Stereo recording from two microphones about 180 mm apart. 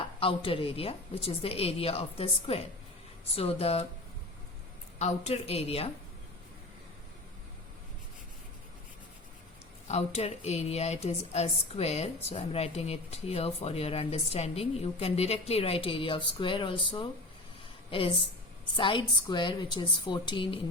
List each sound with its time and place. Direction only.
0.0 s speech: 30° left (ahead or behind)
4.9 s speech: 40° left (ahead or behind)
9.9 s speech: 35° left (ahead or behind)
18.8 s a woman's voice: 25° left (ahead or behind)